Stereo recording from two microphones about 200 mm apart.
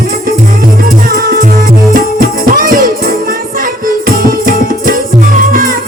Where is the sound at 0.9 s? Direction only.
45° right (ahead or behind).